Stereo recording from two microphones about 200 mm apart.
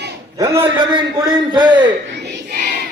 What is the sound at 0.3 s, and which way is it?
Speech, 15° right (ahead or behind).